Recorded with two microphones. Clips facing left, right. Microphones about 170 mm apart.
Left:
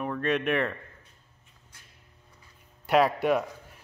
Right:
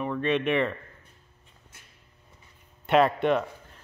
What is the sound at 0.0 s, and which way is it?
Speech, centre (ahead or behind).